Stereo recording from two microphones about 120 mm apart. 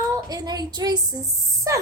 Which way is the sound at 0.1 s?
30° right (ahead or behind).